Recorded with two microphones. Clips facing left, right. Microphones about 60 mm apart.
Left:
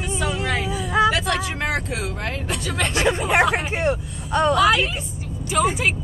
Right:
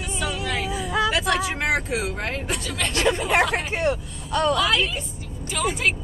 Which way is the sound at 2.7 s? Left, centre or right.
Centre.